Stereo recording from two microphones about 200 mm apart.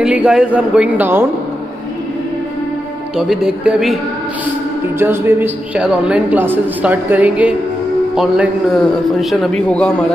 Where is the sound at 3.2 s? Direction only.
5° right (ahead or behind).